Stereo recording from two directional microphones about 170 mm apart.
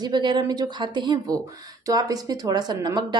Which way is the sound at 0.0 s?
25° right (ahead or behind).